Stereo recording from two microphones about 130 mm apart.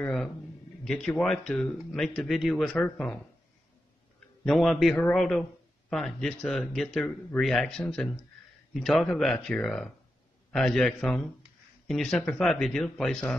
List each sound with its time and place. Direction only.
0.0 s speech: 5° left (ahead or behind)
4.5 s speech: centre (ahead or behind)